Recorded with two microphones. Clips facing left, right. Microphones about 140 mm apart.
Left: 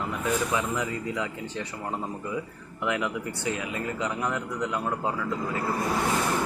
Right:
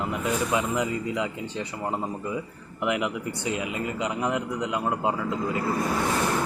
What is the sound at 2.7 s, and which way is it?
Speech, 15° right (ahead or behind).